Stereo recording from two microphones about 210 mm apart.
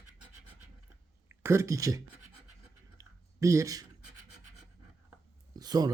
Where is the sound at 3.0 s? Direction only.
15° right (ahead or behind).